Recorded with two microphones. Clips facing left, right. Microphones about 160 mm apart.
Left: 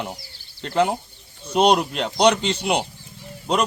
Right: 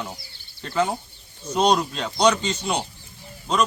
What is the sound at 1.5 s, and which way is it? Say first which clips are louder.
Speech: left 3 dB; 65° left (ahead or behind).